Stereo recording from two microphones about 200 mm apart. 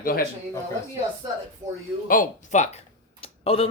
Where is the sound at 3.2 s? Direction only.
30° left (ahead or behind).